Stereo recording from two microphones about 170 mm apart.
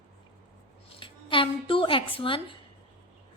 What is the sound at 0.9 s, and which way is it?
A woman's voice, 30° left (ahead or behind).